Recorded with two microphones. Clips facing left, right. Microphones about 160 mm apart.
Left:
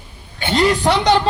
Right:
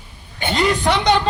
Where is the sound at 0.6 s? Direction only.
35° left (ahead or behind).